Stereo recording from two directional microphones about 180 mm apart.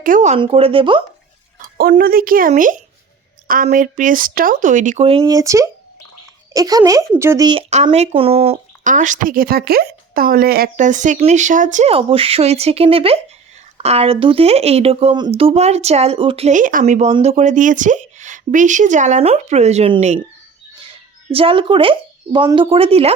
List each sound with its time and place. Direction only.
0.0 s speech: 45° right (ahead or behind)
0.3 s speech: 30° right (ahead or behind)
1.8 s speech: 55° right (ahead or behind); by 5.2 s 35° right (ahead or behind)
5.2 s speech: 20° right (ahead or behind)
7.9 s speech: 35° right (ahead or behind)
21.2 s speech: 30° right (ahead or behind)